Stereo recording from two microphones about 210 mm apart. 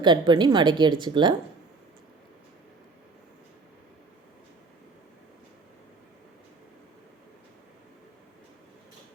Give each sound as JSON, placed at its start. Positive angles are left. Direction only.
{"t": 0.0, "sound": "a woman's voice", "side_deg": -20}